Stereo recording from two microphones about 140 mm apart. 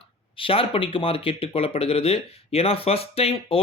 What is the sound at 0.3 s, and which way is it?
Speech, 40° left (ahead or behind).